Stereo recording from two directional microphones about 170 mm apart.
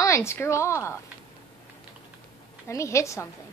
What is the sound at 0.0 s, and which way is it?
Speech, 15° left (ahead or behind).